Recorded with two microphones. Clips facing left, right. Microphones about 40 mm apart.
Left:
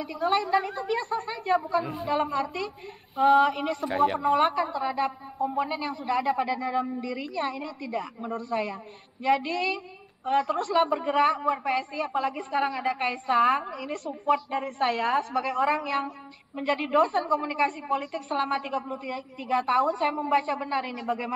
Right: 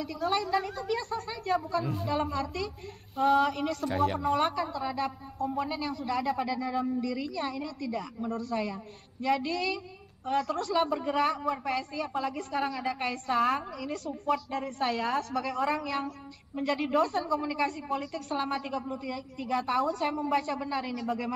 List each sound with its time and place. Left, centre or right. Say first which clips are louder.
0.0 s a woman's voice: left 4 dB; centre